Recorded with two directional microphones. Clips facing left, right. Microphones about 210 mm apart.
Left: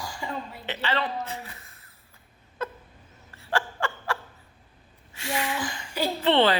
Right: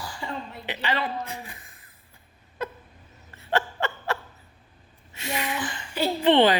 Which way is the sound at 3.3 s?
20° right (ahead or behind).